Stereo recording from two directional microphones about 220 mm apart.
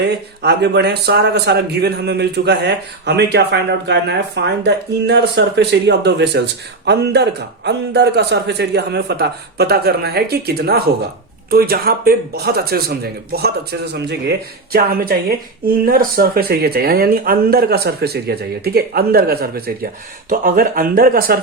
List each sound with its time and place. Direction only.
0.0 s speech: 50° right (ahead or behind)